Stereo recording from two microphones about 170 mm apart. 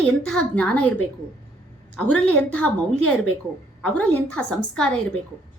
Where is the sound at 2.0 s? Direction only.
10° left (ahead or behind).